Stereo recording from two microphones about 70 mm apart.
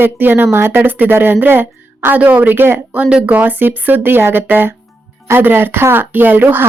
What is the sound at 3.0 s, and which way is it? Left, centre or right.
A woman's voice, centre.